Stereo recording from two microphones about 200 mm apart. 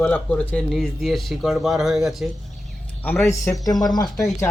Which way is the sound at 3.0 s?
10° left (ahead or behind).